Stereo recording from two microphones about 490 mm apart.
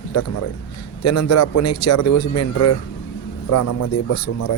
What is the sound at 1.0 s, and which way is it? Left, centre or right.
Speech, left.